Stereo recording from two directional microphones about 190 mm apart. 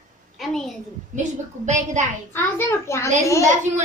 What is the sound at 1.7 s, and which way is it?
Speech, 40° right (ahead or behind).